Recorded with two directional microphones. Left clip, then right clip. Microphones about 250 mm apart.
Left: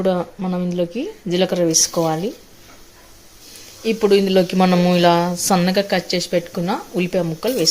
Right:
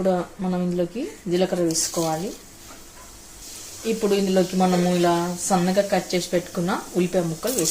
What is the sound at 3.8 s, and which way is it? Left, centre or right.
Speech, left.